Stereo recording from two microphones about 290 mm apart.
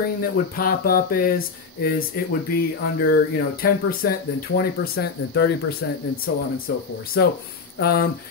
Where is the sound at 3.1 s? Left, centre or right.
Left.